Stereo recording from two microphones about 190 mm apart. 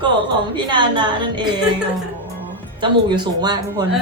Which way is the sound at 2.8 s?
25° right (ahead or behind).